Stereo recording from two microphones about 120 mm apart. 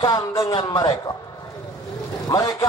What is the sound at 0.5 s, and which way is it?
Speech, 40° left (ahead or behind).